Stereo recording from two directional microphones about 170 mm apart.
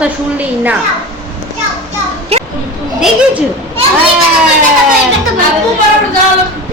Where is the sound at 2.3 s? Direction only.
35° right (ahead or behind).